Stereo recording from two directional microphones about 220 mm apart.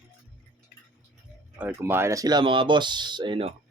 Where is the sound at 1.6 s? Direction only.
10° right (ahead or behind); by 3.5 s 25° right (ahead or behind).